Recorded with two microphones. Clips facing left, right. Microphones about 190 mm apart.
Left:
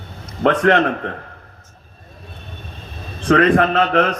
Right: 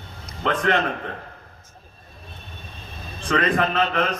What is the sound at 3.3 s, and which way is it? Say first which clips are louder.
Speech: left 8 dB; 65° left (ahead or behind).